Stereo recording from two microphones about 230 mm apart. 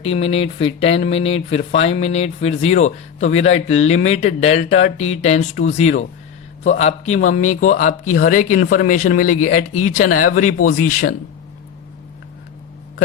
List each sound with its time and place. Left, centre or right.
0.0 s speech: left